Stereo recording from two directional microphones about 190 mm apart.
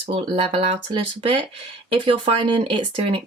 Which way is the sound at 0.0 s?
30° right (ahead or behind).